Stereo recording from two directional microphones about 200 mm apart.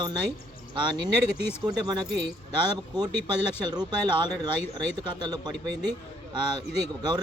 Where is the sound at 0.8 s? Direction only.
25° right (ahead or behind).